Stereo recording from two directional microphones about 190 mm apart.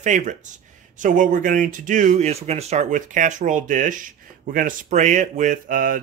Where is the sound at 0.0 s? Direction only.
40° right (ahead or behind).